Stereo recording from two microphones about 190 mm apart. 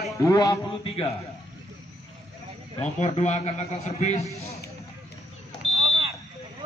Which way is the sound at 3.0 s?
35° left (ahead or behind).